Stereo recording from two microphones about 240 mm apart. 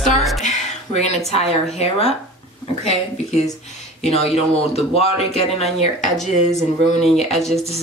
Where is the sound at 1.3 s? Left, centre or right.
Left.